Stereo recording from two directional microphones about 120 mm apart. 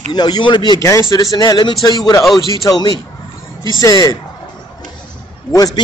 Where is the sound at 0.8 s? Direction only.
25° left (ahead or behind).